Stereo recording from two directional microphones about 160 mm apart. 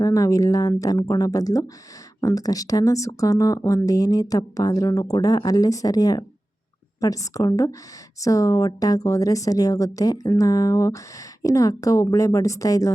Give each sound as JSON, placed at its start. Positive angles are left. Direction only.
{"t": 0.0, "sound": "a woman's voice", "side_deg": 20}